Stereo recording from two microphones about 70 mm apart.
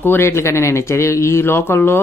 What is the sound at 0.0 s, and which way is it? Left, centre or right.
Speech, left.